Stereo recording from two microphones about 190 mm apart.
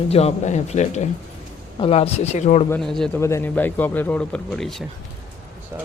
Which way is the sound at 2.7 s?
Centre (ahead or behind).